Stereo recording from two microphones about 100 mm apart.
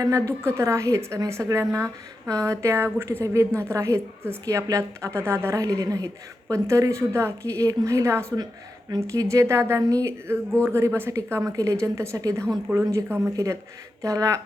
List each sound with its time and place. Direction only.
0.0 s a woman's voice: 30° right (ahead or behind)
13.1 s a woman's voice: 20° right (ahead or behind)
13.3 s a woman's voice: 35° right (ahead or behind)